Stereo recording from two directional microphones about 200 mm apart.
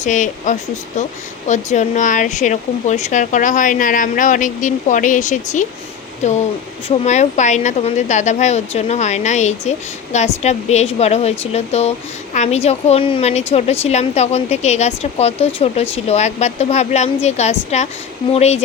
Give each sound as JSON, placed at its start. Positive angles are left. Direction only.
{"t": 0.0, "sound": "speech", "side_deg": 40}